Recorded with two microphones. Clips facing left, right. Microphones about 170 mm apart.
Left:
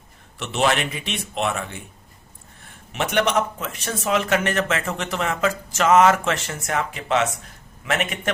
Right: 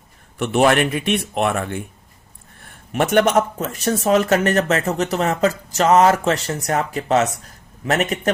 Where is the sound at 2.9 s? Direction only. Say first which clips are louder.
Right 6 dB; 45° right (ahead or behind).